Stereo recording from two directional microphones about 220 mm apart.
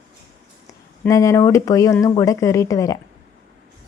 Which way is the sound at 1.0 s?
15° left (ahead or behind).